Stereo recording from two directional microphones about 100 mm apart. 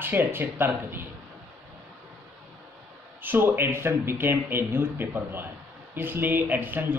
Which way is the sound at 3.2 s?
20° right (ahead or behind).